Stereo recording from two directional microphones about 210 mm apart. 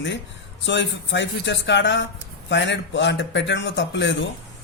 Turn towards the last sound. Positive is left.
turn(degrees=60)  # may be behind; listen again after turning